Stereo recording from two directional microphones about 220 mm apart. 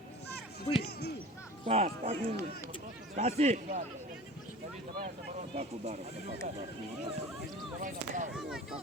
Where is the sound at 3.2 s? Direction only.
30° right (ahead or behind).